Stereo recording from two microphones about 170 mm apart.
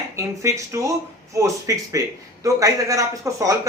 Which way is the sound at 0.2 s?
15° right (ahead or behind).